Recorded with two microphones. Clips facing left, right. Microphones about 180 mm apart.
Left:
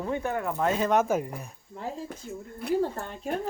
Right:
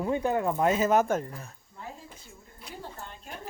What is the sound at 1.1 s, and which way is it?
Speech, 10° left (ahead or behind).